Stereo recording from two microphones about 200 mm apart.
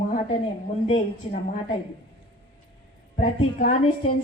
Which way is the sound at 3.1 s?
35° left (ahead or behind).